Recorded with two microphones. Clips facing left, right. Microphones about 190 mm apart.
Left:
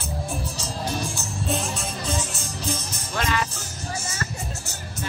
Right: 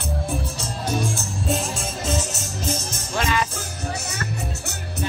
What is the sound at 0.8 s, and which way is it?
Music, centre (ahead or behind).